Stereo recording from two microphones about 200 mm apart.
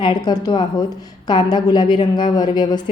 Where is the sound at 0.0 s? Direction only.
20° left (ahead or behind).